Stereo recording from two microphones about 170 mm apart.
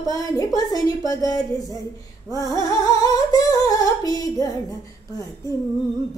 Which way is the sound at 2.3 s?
20° left (ahead or behind).